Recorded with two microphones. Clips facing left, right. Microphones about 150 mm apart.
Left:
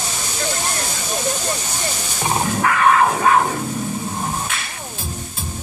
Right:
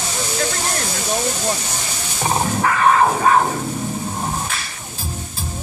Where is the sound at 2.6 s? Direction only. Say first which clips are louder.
Even; 30° right (ahead or behind).